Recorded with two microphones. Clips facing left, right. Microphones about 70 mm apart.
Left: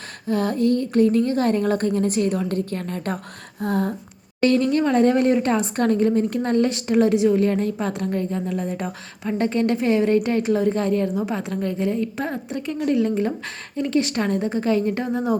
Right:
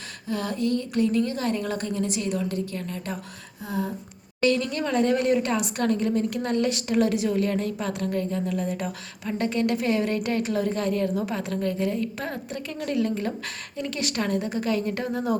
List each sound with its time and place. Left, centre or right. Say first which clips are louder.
0.3 s a woman's voice: left 6 dB; left
3.6 s a sound: left 7 dB; left
4.4 s speech: left 5 dB; left